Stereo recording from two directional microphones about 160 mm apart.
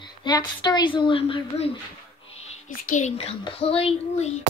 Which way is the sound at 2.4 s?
45° left (ahead or behind).